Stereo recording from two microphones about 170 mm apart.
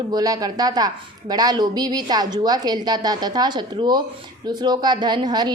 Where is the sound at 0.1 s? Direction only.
20° right (ahead or behind).